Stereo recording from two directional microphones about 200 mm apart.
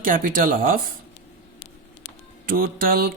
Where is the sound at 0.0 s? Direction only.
45° right (ahead or behind).